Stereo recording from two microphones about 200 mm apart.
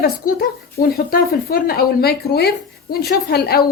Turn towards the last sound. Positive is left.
turn(degrees=50)  # may be behind; listen again after turning